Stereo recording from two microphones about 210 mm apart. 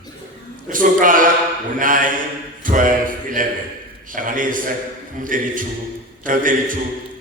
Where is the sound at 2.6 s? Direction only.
40° right (ahead or behind).